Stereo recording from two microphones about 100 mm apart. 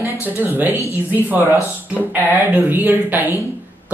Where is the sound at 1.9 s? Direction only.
20° right (ahead or behind).